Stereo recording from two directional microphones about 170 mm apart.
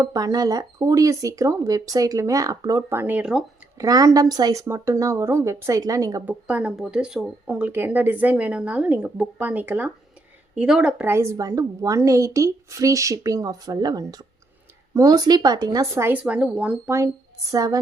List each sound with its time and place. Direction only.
0.0 s a woman's voice: 20° right (ahead or behind); by 3.4 s 5° right (ahead or behind)
3.8 s a woman's voice: 20° right (ahead or behind)
6.5 s a woman's voice: 5° right (ahead or behind)